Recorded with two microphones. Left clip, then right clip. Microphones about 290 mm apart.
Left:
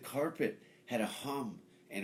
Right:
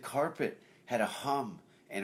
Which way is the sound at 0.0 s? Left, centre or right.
Right.